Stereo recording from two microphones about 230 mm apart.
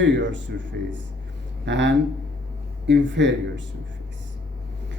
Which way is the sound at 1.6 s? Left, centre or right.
Right.